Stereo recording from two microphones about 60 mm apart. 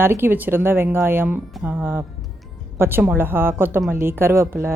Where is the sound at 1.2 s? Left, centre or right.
Right.